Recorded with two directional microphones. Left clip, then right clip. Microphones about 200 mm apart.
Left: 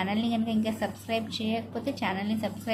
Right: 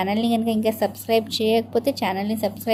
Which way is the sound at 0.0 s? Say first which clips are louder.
Right 8 dB; 30° right (ahead or behind).